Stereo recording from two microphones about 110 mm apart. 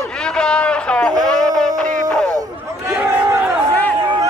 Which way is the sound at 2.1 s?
35° right (ahead or behind).